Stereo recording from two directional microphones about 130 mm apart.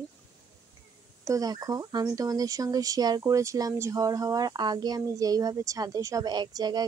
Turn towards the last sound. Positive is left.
turn(degrees=-30)  # may be behind; listen again after turning